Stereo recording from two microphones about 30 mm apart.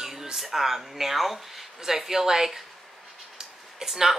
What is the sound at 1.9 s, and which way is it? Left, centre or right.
Speech, centre.